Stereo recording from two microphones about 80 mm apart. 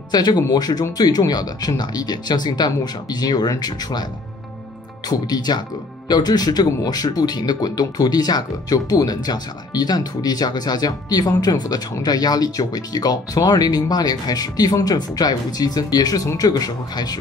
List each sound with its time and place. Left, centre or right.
0.1 s speech: left
5.2 s speech: left